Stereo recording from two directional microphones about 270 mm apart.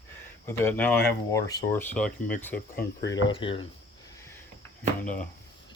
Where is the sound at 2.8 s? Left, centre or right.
Left.